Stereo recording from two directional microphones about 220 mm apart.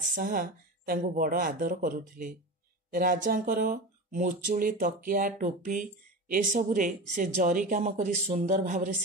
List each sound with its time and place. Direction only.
0.1 s speech: 40° right (ahead or behind)